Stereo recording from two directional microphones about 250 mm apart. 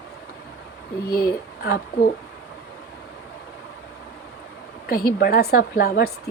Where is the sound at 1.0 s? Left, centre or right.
Left.